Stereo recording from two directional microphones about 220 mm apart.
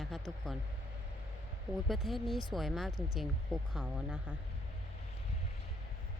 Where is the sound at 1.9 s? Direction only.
Centre (ahead or behind).